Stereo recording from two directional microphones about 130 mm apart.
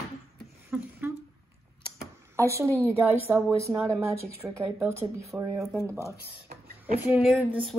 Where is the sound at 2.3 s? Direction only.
20° right (ahead or behind).